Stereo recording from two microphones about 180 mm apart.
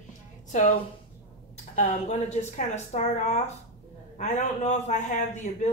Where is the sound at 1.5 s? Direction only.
40° left (ahead or behind).